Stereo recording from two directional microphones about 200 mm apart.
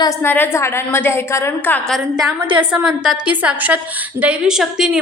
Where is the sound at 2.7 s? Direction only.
5° right (ahead or behind).